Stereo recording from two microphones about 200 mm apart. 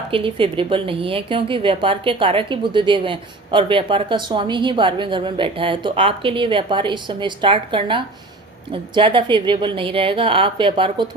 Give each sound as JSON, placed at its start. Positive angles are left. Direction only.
{"t": 0.1, "sound": "a woman's voice", "side_deg": -25}